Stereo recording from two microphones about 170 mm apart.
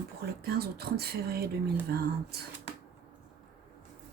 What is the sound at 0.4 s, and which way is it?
Speech, 65° right (ahead or behind).